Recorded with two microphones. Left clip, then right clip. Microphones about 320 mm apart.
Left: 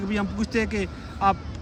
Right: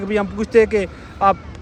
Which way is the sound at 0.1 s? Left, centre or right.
Centre.